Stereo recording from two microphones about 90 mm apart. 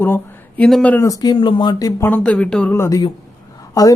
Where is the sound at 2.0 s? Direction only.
20° left (ahead or behind).